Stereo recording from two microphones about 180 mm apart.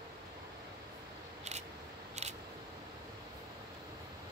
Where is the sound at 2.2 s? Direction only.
40° right (ahead or behind).